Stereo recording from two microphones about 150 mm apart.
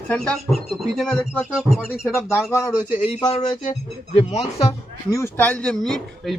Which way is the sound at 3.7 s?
50° left (ahead or behind).